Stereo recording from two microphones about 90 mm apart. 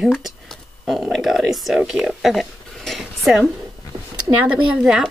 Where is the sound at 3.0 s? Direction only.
5° right (ahead or behind).